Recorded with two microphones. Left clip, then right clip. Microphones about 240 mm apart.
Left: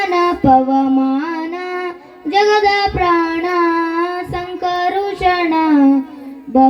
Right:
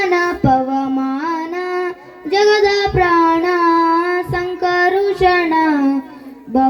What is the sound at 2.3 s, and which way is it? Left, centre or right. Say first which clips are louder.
Child singing: even; right.